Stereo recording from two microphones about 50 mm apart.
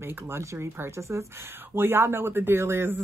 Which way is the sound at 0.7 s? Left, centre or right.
Right.